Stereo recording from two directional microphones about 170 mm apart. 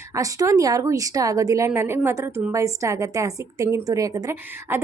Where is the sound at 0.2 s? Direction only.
20° right (ahead or behind).